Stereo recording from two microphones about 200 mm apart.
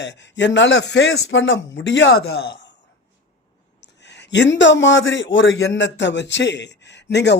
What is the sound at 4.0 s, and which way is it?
A man's voice, 60° left (ahead or behind).